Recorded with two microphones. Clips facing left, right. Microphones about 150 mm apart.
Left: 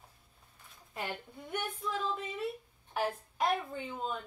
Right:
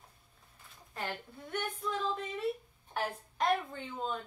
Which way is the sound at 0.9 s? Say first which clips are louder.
Even; 20° left (ahead or behind).